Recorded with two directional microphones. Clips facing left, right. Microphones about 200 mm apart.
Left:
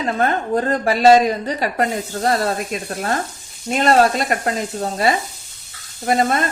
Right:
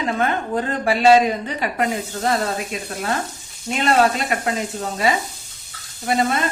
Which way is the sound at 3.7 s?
40° left (ahead or behind).